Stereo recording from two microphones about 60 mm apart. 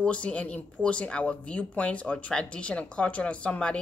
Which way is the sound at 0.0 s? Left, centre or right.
Centre.